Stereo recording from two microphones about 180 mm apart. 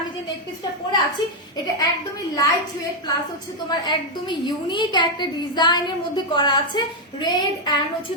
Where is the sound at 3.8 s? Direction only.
25° left (ahead or behind).